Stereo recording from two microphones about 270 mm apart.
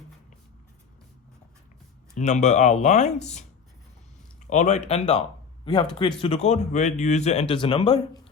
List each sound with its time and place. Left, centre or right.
2.1 s a man's voice: left
4.4 s a man's voice: left